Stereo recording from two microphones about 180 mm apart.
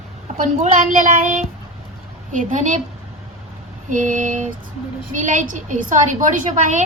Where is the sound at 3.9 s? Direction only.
45° right (ahead or behind).